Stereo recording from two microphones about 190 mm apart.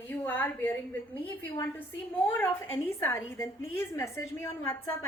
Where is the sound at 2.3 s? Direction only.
10° left (ahead or behind).